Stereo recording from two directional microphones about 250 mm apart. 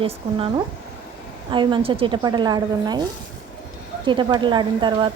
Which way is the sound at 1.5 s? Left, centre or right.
Centre.